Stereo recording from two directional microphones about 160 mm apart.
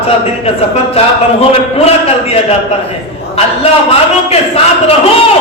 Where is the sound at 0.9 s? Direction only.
40° left (ahead or behind).